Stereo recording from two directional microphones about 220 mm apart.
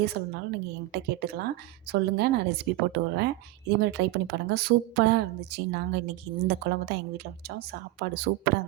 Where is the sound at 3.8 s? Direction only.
50° right (ahead or behind).